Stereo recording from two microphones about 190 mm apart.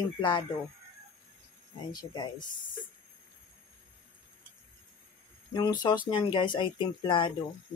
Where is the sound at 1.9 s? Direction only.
20° left (ahead or behind).